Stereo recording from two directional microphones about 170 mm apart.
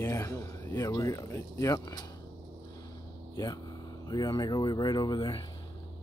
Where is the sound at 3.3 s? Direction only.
25° left (ahead or behind).